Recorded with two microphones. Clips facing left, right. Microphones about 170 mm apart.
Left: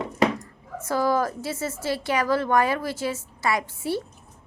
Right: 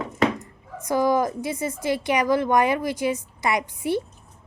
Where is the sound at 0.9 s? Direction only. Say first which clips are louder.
Right 2 dB; 15° right (ahead or behind).